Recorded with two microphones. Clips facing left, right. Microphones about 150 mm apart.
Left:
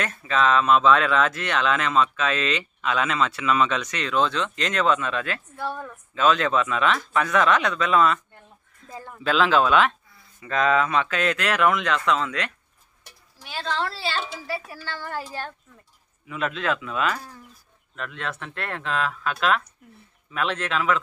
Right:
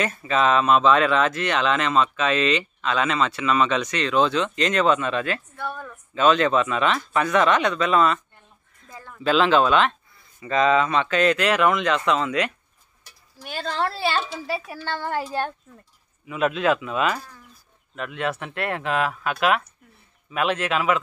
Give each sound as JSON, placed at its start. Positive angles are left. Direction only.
{"t": 0.0, "sound": "speech", "side_deg": -5}
{"t": 8.9, "sound": "a sound", "side_deg": 25}
{"t": 9.2, "sound": "speech", "side_deg": 0}
{"t": 13.4, "sound": "a woman's voice", "side_deg": -50}
{"t": 16.3, "sound": "speech", "side_deg": -10}